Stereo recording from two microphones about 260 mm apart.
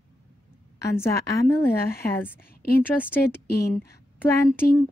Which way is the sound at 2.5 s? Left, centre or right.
Left.